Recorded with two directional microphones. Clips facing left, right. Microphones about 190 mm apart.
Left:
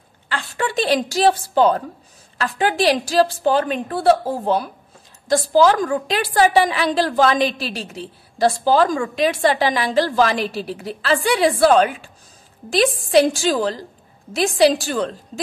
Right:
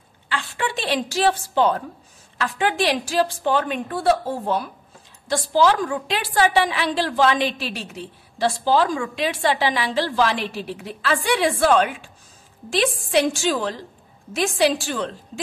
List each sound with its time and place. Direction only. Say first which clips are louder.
0.3 s a woman's voice: left 2 dB; 40° left (ahead or behind)